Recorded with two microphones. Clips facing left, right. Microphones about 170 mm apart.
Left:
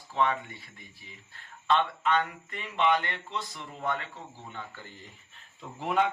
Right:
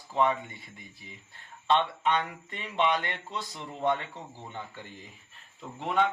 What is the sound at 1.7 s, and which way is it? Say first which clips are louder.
Speech: even; 20° right (ahead or behind).